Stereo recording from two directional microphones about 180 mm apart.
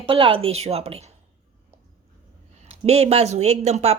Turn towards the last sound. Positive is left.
turn(degrees=-35)  # may be behind; listen again after turning